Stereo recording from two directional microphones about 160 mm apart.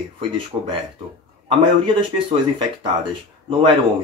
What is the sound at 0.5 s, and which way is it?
Speech, 20° right (ahead or behind).